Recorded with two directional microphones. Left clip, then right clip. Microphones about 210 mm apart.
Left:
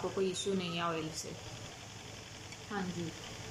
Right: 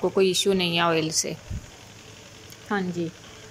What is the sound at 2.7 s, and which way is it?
Speech, 55° right (ahead or behind).